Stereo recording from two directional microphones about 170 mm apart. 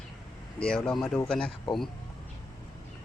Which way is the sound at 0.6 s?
5° left (ahead or behind).